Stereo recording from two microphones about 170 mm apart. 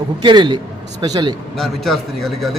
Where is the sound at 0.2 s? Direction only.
25° right (ahead or behind).